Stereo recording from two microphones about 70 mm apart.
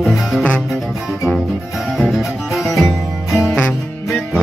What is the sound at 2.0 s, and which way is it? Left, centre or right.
Music, centre.